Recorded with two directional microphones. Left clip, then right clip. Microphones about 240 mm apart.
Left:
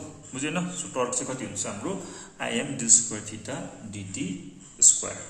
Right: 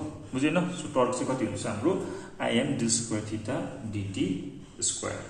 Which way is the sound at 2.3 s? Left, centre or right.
Centre.